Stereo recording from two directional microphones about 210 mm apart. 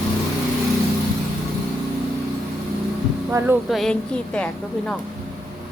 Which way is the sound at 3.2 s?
10° right (ahead or behind).